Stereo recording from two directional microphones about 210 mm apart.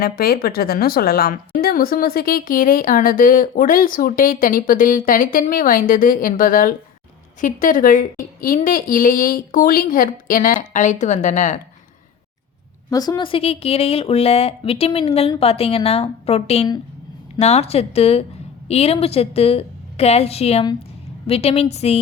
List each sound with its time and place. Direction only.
0.0 s a woman's voice: 45° left (ahead or behind)
12.9 s speech: 20° left (ahead or behind)